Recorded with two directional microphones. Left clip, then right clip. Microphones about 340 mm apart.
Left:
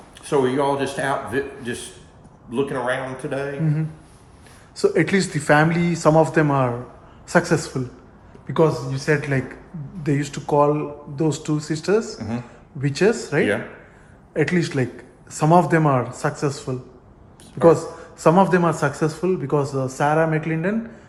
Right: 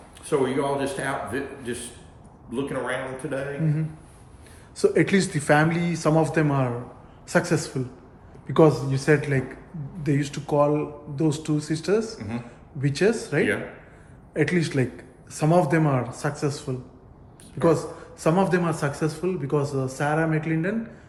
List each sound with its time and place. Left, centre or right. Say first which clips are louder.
0.3 s a man's voice: left 4 dB; left
4.8 s a man's voice: left 2 dB; centre
8.4 s a man's voice: even; centre